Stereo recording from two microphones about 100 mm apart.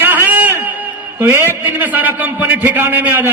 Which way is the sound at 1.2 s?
25° right (ahead or behind).